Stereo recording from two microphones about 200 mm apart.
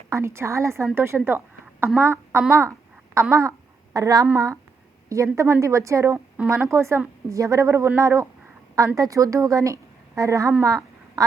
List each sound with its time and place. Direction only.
0.1 s a woman's voice: 15° right (ahead or behind)